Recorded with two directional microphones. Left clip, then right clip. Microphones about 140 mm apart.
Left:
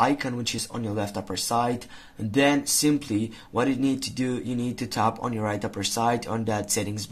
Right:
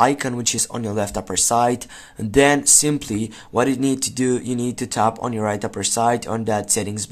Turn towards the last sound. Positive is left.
turn(degrees=-30)  # may be behind; listen again after turning